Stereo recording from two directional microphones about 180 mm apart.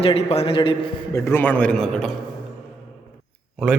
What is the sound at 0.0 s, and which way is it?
A man's voice, 35° left (ahead or behind).